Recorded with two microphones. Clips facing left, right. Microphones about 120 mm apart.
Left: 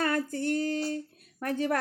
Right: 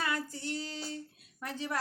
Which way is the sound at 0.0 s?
50° left (ahead or behind).